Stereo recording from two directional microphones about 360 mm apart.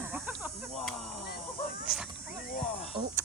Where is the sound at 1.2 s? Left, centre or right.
Left.